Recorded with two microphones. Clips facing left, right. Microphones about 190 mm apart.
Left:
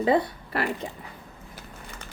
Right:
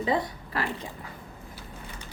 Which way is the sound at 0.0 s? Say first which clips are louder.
Left 5 dB; 60° left (ahead or behind).